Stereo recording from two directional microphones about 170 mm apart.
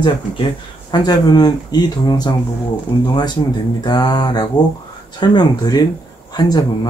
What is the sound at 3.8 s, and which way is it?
Speech, 25° left (ahead or behind).